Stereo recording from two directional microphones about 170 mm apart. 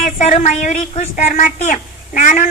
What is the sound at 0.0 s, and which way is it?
A woman's voice, 45° left (ahead or behind).